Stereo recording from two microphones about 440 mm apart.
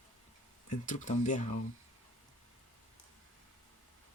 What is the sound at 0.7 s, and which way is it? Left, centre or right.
Speech, centre.